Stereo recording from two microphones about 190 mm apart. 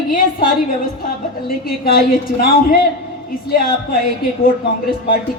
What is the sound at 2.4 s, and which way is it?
Speech, 50° left (ahead or behind).